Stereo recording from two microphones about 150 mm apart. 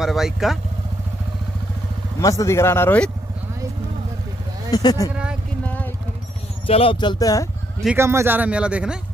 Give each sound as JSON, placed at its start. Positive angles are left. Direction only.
{"t": 0.0, "sound": "speech", "side_deg": 0}
{"t": 2.1, "sound": "speech", "side_deg": 20}
{"t": 4.6, "sound": "speech", "side_deg": 25}
{"t": 5.1, "sound": "speech", "side_deg": -5}
{"t": 6.7, "sound": "speech", "side_deg": 35}
{"t": 8.0, "sound": "a man's voice", "side_deg": -15}